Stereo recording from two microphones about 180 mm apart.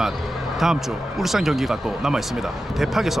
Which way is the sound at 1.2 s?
Centre (ahead or behind).